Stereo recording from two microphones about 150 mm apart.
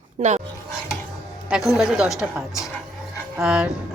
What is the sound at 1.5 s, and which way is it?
A woman's voice, centre (ahead or behind).